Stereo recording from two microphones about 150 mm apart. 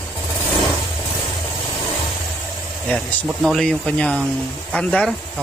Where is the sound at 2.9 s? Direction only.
5° left (ahead or behind).